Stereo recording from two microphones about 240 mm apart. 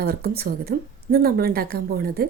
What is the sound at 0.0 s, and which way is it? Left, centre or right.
A woman's voice, right.